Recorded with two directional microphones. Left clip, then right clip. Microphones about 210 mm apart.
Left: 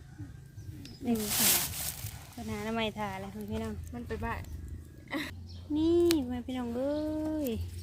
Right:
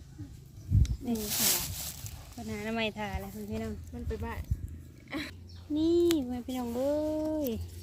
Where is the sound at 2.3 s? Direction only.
5° left (ahead or behind).